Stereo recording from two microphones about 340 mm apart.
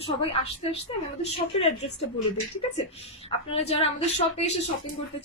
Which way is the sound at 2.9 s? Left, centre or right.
Centre.